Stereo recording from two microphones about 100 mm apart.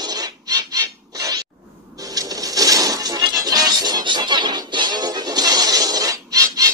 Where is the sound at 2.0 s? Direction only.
35° right (ahead or behind).